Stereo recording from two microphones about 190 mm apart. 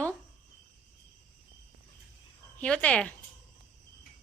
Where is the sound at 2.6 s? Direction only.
5° left (ahead or behind).